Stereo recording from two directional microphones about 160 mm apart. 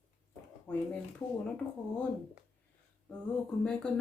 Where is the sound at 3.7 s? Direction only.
5° left (ahead or behind).